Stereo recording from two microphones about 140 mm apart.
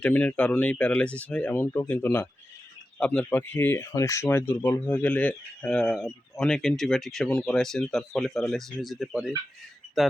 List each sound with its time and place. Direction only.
0.0 s speech: 10° left (ahead or behind)